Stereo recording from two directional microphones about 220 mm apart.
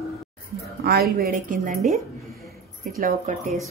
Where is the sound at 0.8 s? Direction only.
45° right (ahead or behind).